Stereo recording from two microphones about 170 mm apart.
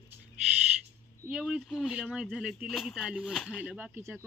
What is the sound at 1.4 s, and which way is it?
Speech, centre (ahead or behind).